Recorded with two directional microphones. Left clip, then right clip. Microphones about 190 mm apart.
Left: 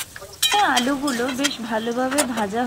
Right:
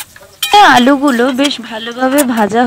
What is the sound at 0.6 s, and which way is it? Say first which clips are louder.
Speech: right 13 dB; 55° right (ahead or behind).